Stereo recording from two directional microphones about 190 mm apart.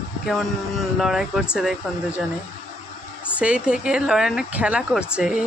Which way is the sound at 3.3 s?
5° right (ahead or behind).